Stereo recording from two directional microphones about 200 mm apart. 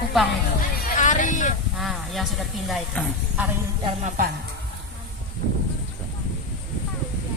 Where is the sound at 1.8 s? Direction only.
Centre (ahead or behind).